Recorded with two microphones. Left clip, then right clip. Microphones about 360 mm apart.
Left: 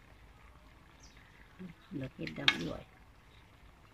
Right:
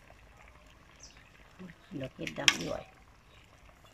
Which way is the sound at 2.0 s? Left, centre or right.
Right.